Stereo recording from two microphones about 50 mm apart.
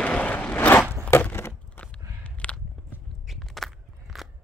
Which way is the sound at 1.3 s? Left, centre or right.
Left.